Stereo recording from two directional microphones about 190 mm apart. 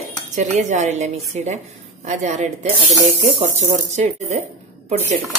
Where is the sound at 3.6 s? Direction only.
35° right (ahead or behind).